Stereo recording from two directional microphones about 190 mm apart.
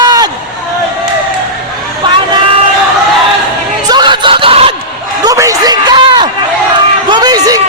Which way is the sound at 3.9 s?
25° right (ahead or behind).